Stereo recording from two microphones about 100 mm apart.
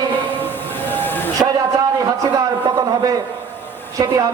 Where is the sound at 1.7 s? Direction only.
35° right (ahead or behind).